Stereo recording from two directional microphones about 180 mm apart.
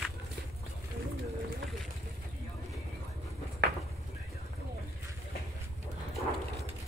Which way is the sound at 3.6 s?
65° right (ahead or behind).